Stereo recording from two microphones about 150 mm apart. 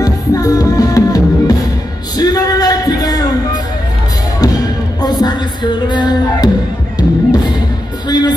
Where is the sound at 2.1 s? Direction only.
25° left (ahead or behind).